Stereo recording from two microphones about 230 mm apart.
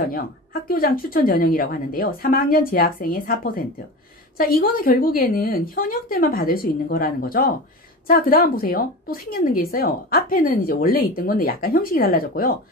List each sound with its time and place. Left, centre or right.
0.1 s a woman's voice: left